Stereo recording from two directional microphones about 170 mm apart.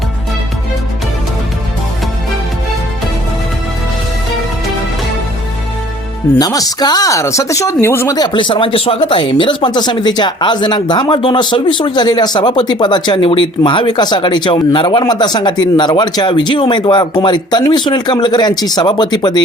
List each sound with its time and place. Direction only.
6.4 s speech: 20° left (ahead or behind)